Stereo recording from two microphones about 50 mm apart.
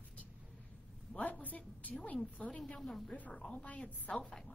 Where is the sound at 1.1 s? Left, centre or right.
Left.